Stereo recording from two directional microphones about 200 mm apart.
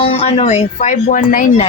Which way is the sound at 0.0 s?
30° left (ahead or behind).